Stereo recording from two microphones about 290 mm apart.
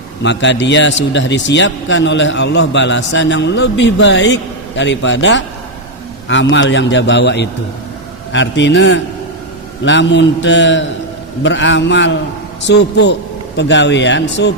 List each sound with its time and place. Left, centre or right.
0.2 s a man's voice: left